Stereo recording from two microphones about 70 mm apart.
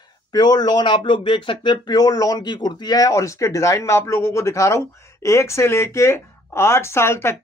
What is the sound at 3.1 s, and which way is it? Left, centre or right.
Speech, left.